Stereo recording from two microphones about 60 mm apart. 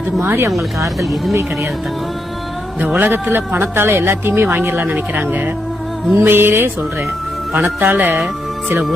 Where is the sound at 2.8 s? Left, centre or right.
Right.